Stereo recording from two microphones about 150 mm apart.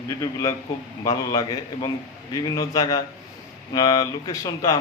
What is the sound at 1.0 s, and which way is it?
Speech, 25° left (ahead or behind).